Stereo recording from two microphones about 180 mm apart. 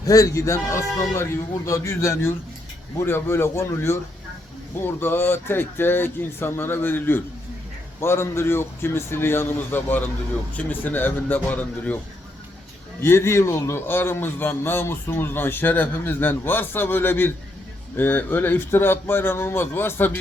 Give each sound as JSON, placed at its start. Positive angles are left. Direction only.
{"t": 0.0, "sound": "a man's voice", "side_deg": 20}
{"t": 4.9, "sound": "a man's voice", "side_deg": 10}
{"t": 13.0, "sound": "a man's voice", "side_deg": 15}